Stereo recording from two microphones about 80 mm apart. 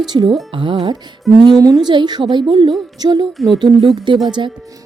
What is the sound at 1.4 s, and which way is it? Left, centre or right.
Speech, right.